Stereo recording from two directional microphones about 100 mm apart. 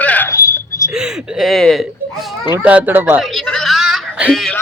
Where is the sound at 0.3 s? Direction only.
35° left (ahead or behind).